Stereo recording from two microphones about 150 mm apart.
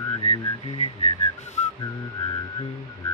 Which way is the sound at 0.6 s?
45° left (ahead or behind).